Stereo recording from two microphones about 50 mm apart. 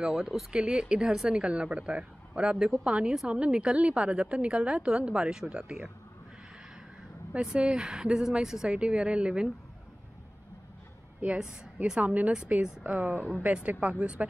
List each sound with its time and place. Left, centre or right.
0.0 s speech: centre
0.5 s speech: centre
1.4 s a woman's voice: right
7.4 s speech: centre
8.7 s a woman's voice: right
11.3 s speech: centre
12.0 s a woman's voice: right